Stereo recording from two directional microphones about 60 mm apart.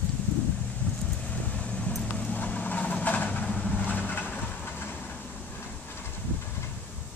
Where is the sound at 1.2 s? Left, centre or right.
Left.